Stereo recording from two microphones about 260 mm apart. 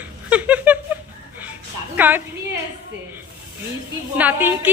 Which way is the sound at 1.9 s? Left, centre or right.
Centre.